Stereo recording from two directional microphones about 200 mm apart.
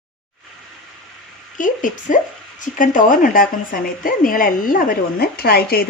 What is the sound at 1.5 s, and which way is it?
A woman's voice, 40° left (ahead or behind).